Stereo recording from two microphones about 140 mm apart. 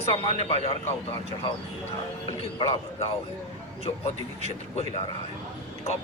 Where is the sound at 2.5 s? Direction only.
40° left (ahead or behind).